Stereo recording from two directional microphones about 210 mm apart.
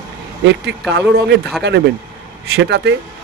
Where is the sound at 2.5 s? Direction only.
55° right (ahead or behind).